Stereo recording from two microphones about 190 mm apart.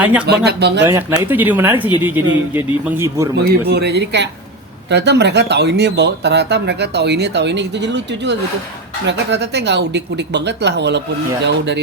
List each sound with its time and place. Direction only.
0.0 s speech: 10° right (ahead or behind)
0.3 s speech: 60° right (ahead or behind)
1.2 s speech: 10° right (ahead or behind)
3.7 s speech: 60° right (ahead or behind)